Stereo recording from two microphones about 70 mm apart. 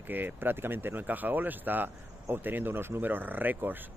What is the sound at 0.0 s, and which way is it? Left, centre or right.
Speech, right.